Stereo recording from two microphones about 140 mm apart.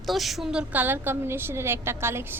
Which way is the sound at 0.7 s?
15° right (ahead or behind).